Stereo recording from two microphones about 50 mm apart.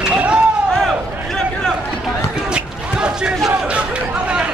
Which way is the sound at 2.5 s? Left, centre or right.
Centre.